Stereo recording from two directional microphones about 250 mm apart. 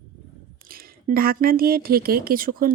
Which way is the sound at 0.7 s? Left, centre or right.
Right.